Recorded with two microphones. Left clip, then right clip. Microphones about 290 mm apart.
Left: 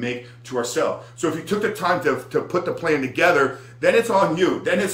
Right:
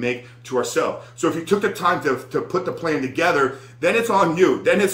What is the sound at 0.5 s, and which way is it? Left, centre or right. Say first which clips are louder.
Speech: right 1 dB; centre.